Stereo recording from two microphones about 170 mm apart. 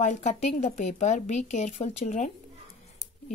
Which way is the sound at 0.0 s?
45° left (ahead or behind).